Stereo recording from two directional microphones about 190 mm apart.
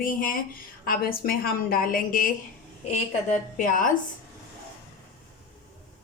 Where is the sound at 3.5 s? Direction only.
45° left (ahead or behind).